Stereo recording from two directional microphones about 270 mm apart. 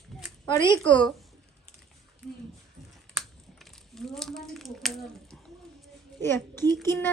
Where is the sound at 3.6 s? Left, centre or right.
Centre.